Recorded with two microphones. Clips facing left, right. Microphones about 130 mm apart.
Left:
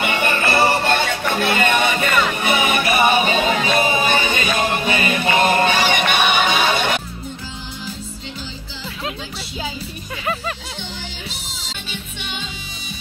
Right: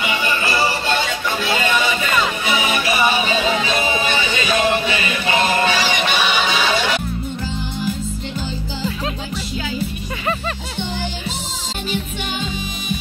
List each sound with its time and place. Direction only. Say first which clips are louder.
0.0 s music: left 2 dB; 60° left (ahead or behind)